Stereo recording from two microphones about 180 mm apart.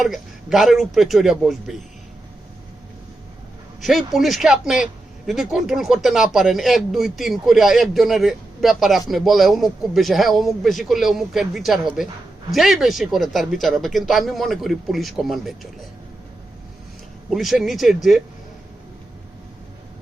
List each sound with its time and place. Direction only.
0.0 s speech: centre (ahead or behind)
3.8 s speech: centre (ahead or behind)
17.2 s speech: centre (ahead or behind)